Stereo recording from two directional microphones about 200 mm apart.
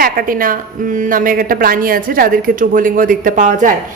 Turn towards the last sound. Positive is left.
turn(degrees=-40)  # may be behind; listen again after turning